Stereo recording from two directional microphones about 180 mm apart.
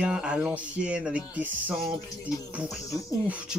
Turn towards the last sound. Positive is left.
turn(degrees=-5)  # may be behind; listen again after turning